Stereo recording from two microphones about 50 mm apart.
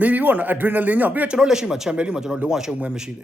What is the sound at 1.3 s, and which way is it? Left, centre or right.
Speech, centre.